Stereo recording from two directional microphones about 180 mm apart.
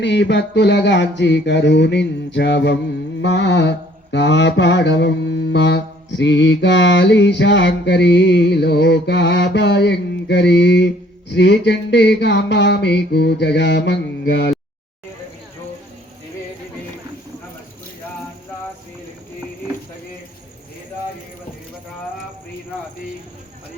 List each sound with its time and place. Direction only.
0.0 s mantra: 80° left